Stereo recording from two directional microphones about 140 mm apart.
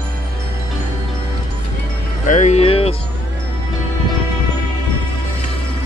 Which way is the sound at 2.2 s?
60° left (ahead or behind).